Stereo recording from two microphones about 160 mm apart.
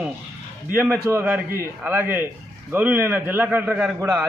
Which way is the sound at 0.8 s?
15° right (ahead or behind).